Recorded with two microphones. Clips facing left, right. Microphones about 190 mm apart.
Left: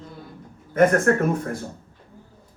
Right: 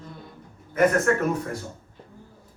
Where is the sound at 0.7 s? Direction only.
50° left (ahead or behind).